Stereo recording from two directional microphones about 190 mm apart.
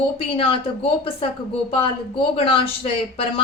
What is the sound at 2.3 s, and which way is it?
Speech, 30° left (ahead or behind).